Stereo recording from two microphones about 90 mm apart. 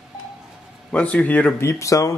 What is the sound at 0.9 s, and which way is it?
Speech, 15° left (ahead or behind).